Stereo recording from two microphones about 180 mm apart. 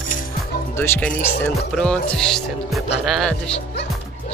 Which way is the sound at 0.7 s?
10° left (ahead or behind).